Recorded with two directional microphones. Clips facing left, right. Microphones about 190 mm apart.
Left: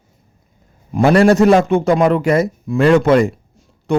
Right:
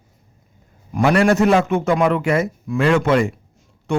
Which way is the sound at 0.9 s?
30° left (ahead or behind).